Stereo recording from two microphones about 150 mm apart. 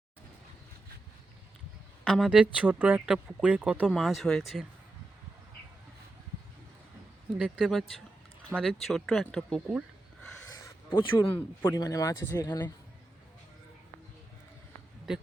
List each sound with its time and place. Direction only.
2.0 s speech: centre (ahead or behind)
7.3 s speech: 5° right (ahead or behind)
10.9 s speech: 15° left (ahead or behind)